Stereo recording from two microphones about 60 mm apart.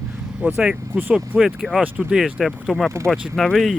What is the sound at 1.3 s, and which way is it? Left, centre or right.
Speech, right.